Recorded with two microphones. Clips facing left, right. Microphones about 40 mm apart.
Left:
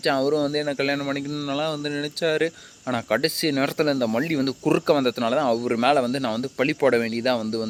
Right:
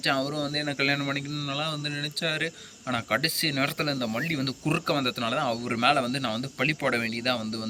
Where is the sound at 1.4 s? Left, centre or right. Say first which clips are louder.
Left 5 dB; centre.